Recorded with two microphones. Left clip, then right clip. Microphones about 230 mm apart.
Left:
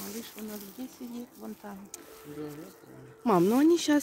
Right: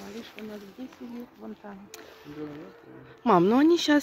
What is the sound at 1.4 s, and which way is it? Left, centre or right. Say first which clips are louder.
Speech: right 1 dB; left.